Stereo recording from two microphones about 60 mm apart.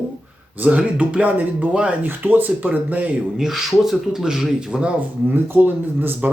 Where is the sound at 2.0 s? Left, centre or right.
Right.